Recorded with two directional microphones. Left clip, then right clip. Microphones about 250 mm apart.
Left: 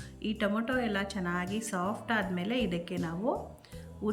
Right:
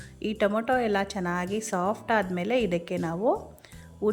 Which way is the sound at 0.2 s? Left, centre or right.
Centre.